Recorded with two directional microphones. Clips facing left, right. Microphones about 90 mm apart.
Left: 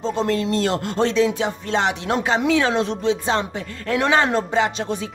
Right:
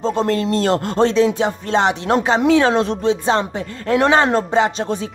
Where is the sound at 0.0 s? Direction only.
40° right (ahead or behind).